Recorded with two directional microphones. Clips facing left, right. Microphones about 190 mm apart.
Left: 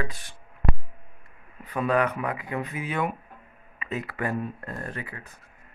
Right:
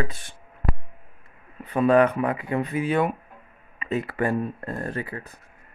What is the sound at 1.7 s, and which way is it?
Speech, 30° right (ahead or behind).